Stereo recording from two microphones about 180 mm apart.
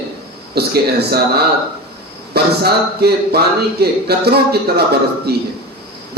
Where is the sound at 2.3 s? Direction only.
60° right (ahead or behind).